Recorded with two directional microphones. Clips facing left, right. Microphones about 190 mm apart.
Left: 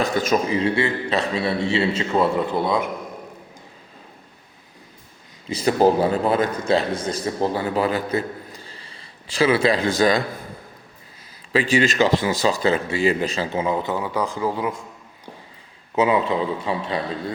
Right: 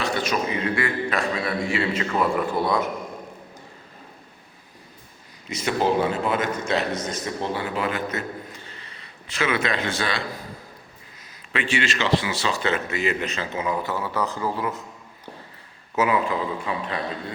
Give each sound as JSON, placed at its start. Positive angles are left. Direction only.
{"t": 0.4, "sound": "a man's voice", "side_deg": 30}
{"t": 5.5, "sound": "a man's voice", "side_deg": 35}
{"t": 11.5, "sound": "speech", "side_deg": 35}
{"t": 16.0, "sound": "a man's voice", "side_deg": 25}